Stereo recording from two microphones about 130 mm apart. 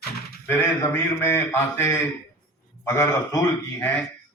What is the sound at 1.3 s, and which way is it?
A man's voice, 15° left (ahead or behind).